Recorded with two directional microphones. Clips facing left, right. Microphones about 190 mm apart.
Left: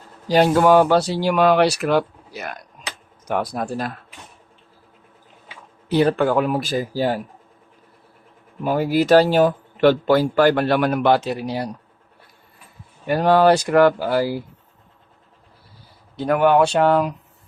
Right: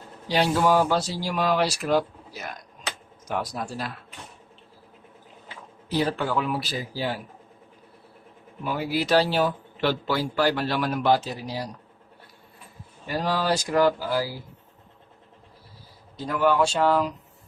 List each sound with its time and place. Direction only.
0.3 s speech: 50° left (ahead or behind)
5.9 s speech: 60° left (ahead or behind); by 7.2 s 45° left (ahead or behind)
8.6 s speech: 45° left (ahead or behind); by 11.7 s 60° left (ahead or behind)
13.1 s speech: 60° left (ahead or behind)
16.1 s speech: 60° left (ahead or behind)